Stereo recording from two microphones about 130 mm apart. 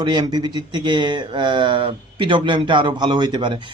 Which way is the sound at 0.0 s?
35° right (ahead or behind).